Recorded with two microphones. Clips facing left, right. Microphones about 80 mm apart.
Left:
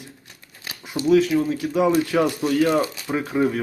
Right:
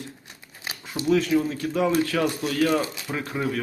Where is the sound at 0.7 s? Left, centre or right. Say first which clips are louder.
Right 2 dB; right.